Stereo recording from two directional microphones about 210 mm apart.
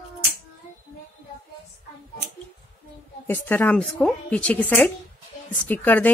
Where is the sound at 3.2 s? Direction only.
10° left (ahead or behind).